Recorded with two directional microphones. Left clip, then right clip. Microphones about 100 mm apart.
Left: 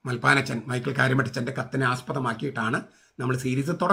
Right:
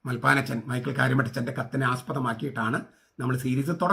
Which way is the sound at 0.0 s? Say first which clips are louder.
Left 2 dB; 25° left (ahead or behind).